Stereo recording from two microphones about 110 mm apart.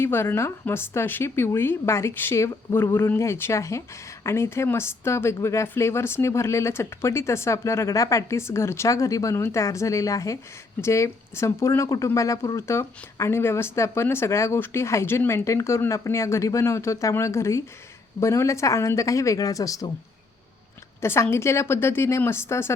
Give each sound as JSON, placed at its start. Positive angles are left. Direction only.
{"t": 0.0, "sound": "speech", "side_deg": 20}
{"t": 21.0, "sound": "speech", "side_deg": 25}